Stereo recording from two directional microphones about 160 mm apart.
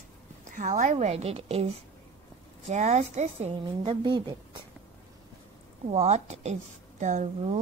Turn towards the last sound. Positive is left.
turn(degrees=-50)  # may be behind; listen again after turning